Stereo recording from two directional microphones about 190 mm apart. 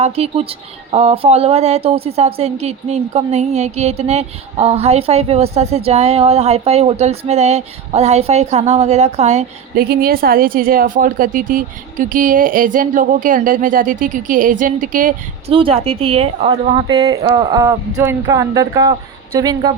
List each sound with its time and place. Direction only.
0.0 s speech: 30° right (ahead or behind)
9.7 s a woman's voice: 55° right (ahead or behind)
15.5 s speech: 30° right (ahead or behind)
16.8 s speech: 20° right (ahead or behind)